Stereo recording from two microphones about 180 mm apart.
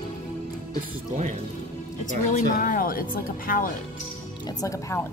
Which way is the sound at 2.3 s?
50° left (ahead or behind).